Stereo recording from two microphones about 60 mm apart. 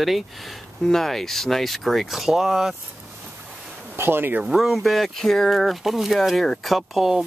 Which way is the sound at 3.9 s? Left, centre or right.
Right.